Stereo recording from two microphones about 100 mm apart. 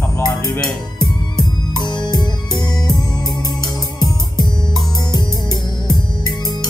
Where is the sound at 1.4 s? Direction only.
45° left (ahead or behind).